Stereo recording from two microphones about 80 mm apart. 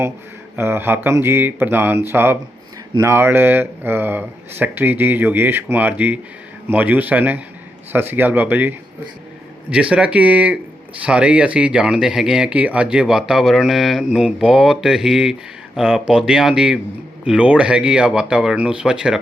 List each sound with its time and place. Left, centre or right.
0.5 s speech: right
9.6 s speech: centre